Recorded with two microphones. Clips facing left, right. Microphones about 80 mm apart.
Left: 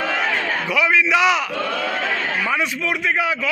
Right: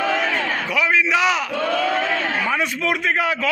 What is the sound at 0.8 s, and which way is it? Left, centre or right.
Speech, right.